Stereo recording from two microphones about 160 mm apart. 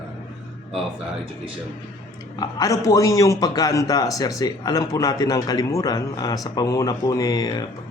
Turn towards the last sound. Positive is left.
turn(degrees=25)  # may be behind; listen again after turning